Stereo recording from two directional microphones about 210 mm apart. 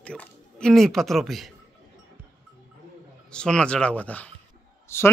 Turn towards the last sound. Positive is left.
turn(degrees=10)  # may be behind; listen again after turning